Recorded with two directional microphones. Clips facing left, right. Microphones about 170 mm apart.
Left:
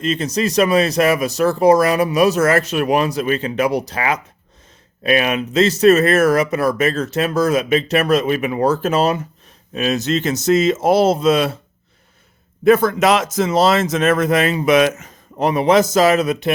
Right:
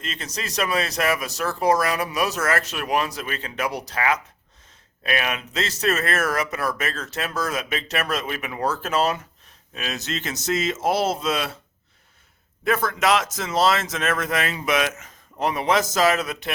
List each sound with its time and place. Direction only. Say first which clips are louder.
0.0 s speech: left 14 dB; 20° left (ahead or behind)
12.6 s speech: left 9 dB; 25° left (ahead or behind)